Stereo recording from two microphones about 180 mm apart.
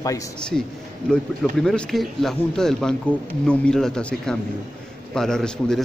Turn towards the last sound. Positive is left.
turn(degrees=5)  # may be behind; listen again after turning